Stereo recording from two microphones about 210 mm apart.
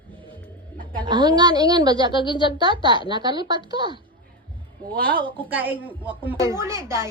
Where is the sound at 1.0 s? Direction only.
20° right (ahead or behind).